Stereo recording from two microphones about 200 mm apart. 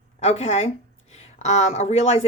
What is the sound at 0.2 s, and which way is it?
Speech, 30° left (ahead or behind).